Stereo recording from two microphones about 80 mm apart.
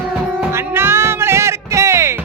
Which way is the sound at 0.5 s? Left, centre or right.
Right.